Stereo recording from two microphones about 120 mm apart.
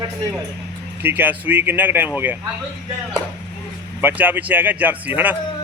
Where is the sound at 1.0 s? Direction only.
15° right (ahead or behind).